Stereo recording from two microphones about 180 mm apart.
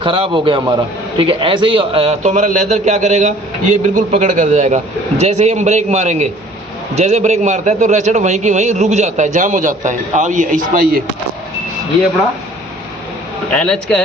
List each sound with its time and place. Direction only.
0.0 s a man's voice: 30° right (ahead or behind); by 11.0 s 50° right (ahead or behind)
13.5 s speech: 5° left (ahead or behind)